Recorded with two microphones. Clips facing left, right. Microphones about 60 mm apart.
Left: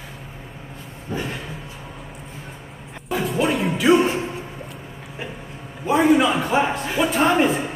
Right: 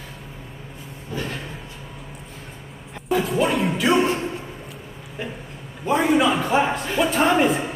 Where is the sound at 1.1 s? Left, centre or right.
Left.